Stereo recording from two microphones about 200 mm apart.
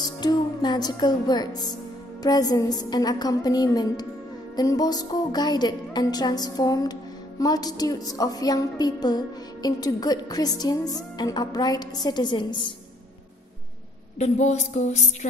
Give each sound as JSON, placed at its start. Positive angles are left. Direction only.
{"t": 0.0, "sound": "speech", "side_deg": 20}
{"t": 2.2, "sound": "music", "side_deg": 20}
{"t": 14.1, "sound": "a sound", "side_deg": 35}